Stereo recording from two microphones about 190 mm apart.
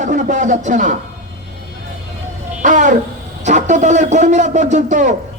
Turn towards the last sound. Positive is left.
turn(degrees=-40)  # may be behind; listen again after turning